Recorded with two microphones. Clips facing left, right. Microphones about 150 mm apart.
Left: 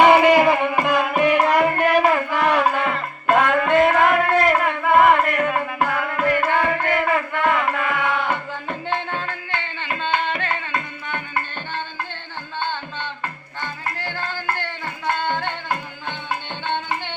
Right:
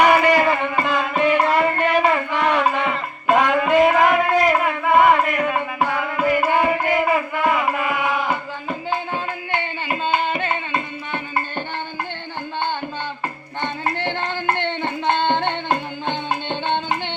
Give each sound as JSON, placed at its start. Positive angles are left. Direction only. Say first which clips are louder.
{"t": 0.0, "sound": "music", "louder": "left 2 dB", "side_deg": 20}
{"t": 10.7, "sound": "music", "louder": "right 2 dB", "side_deg": -20}
{"t": 13.6, "sound": "a sound", "louder": "right 6 dB", "side_deg": -25}